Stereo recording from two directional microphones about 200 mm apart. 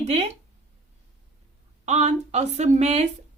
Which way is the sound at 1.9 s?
35° right (ahead or behind).